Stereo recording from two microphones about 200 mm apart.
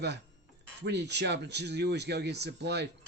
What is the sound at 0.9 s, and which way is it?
A man's voice, 55° right (ahead or behind).